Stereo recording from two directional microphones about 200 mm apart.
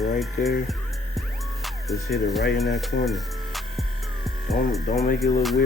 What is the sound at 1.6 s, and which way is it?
Speech, centre (ahead or behind).